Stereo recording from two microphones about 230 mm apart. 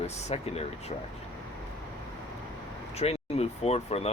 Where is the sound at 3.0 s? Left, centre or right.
Left.